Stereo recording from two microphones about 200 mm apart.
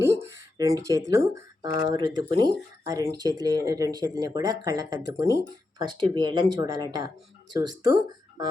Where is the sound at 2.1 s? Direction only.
20° right (ahead or behind).